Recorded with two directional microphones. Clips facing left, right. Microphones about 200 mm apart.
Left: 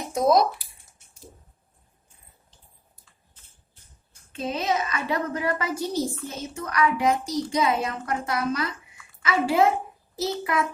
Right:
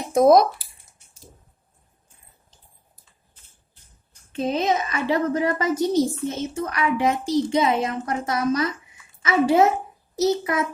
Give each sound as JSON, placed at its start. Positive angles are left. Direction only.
{"t": 0.1, "sound": "speech", "side_deg": -55}
{"t": 4.4, "sound": "a woman's voice", "side_deg": -35}